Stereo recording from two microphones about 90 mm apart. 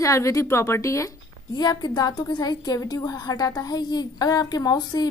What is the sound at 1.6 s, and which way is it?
A woman's voice, 50° left (ahead or behind).